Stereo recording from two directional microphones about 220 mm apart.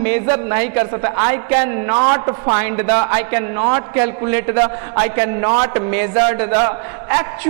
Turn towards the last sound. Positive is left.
turn(degrees=-15)  # may be behind; listen again after turning